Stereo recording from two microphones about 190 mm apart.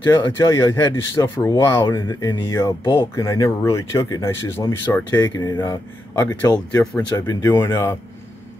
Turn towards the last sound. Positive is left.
turn(degrees=15)  # may be behind; listen again after turning